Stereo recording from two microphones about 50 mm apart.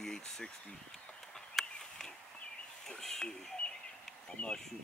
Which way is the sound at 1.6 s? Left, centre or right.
Centre.